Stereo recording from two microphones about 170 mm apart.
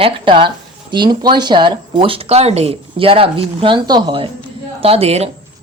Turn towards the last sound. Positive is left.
turn(degrees=-35)  # may be behind; listen again after turning